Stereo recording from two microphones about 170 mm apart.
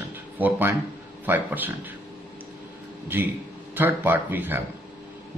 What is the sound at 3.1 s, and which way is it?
A man's voice, 10° right (ahead or behind).